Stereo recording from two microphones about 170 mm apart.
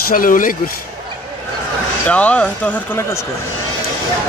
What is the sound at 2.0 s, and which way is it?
Speech, 5° left (ahead or behind).